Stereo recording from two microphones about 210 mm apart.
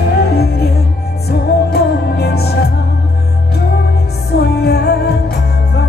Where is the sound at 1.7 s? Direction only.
50° left (ahead or behind).